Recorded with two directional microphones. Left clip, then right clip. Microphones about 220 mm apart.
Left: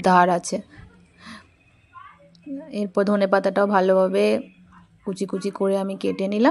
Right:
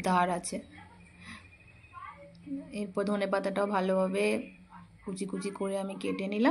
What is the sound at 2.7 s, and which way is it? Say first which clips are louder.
A woman's voice: left 11 dB; 40° left (ahead or behind).